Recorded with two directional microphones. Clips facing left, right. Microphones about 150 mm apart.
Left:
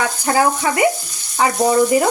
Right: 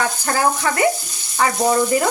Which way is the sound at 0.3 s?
15° left (ahead or behind).